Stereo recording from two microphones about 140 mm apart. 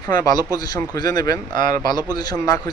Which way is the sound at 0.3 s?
30° left (ahead or behind).